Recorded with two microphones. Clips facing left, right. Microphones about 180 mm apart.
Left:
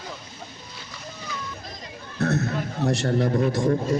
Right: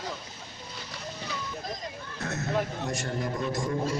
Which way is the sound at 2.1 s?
65° left (ahead or behind).